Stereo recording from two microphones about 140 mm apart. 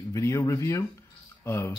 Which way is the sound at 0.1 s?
20° left (ahead or behind).